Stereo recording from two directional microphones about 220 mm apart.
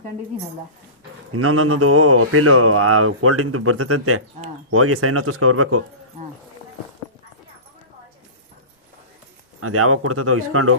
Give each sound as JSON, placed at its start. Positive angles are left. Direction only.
{"t": 1.3, "sound": "speech", "side_deg": -80}
{"t": 9.6, "sound": "speech", "side_deg": -80}